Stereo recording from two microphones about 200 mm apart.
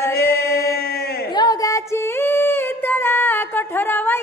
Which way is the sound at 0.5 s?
50° left (ahead or behind).